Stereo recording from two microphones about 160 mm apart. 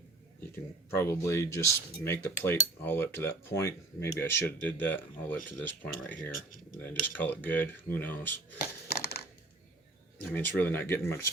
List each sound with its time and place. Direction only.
1.2 s speech: 20° left (ahead or behind)
8.9 s crushing: 80° left
10.2 s speech: 10° left (ahead or behind)